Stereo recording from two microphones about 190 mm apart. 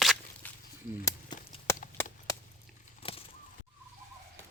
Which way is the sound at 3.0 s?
30° left (ahead or behind).